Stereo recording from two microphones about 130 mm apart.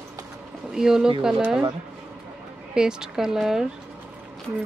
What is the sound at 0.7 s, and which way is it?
Speech, 5° right (ahead or behind).